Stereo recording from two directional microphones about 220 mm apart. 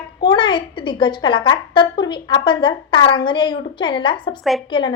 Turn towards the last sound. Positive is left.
turn(degrees=20)  # may be behind; listen again after turning